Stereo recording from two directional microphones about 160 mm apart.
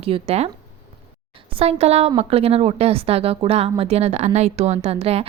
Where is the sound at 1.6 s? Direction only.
40° right (ahead or behind).